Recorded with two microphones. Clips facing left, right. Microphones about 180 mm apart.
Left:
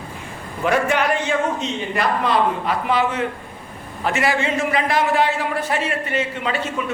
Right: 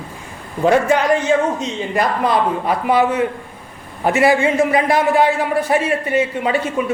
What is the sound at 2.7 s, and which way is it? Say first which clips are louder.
A man's voice: right 4 dB; 15° right (ahead or behind).